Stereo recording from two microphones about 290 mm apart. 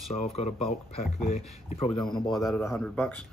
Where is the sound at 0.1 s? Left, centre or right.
Left.